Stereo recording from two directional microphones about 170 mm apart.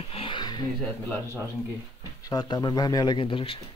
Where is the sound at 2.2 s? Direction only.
25° left (ahead or behind).